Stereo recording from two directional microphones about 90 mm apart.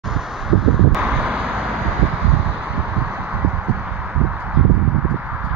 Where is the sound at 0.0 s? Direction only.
5° right (ahead or behind).